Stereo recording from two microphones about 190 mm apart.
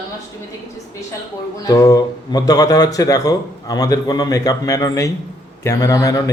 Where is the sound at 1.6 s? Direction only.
20° left (ahead or behind).